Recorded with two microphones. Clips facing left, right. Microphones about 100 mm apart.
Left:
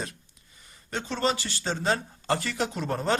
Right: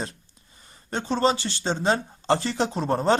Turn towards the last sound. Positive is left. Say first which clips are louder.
# right 5 dB
turn(degrees=-30)  # may be behind; listen again after turning